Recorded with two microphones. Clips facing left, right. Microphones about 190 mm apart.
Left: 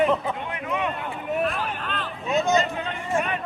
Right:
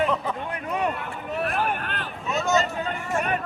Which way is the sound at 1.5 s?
60° right (ahead or behind).